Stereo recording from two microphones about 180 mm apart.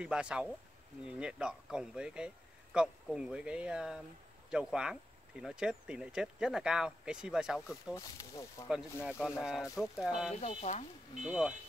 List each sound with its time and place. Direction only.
0.0 s speech: 5° right (ahead or behind)
7.9 s speech: 15° left (ahead or behind)
9.4 s speech: 5° right (ahead or behind)
10.4 s speech: 40° left (ahead or behind)
11.2 s speech: 5° right (ahead or behind)